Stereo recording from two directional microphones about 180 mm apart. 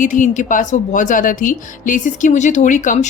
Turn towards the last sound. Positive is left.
turn(degrees=45)  # may be behind; listen again after turning